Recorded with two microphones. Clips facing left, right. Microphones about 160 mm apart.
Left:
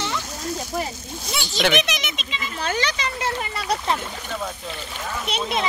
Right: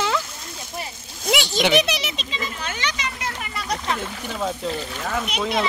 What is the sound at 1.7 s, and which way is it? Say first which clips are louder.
Speech: right 3 dB; 35° right (ahead or behind).